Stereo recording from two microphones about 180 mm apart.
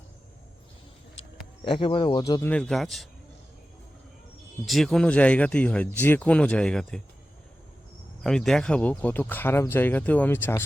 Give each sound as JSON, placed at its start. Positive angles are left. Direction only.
{"t": 1.6, "sound": "speech", "side_deg": 30}
{"t": 2.4, "sound": "speech", "side_deg": 5}
{"t": 4.6, "sound": "speech", "side_deg": 0}
{"t": 8.2, "sound": "speech", "side_deg": 0}